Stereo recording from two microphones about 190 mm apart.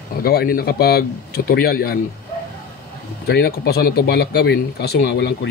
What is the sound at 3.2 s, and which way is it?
Speech, 55° left (ahead or behind).